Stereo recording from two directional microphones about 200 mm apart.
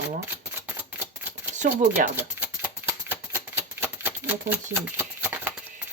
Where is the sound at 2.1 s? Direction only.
10° right (ahead or behind).